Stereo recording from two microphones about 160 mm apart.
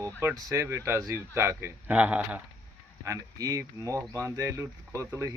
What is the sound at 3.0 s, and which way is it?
Speech, 20° right (ahead or behind).